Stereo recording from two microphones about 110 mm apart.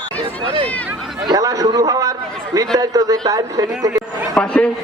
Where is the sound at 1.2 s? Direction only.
35° right (ahead or behind).